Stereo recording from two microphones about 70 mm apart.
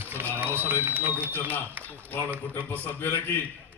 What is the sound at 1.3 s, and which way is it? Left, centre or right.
A man's voice, left.